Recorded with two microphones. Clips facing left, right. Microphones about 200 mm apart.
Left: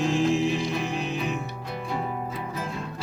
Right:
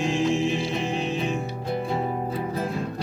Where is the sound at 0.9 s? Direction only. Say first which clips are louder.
Right 2 dB; 35° right (ahead or behind).